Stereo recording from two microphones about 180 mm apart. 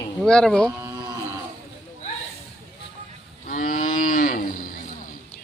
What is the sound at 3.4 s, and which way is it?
Cattle, 50° left (ahead or behind).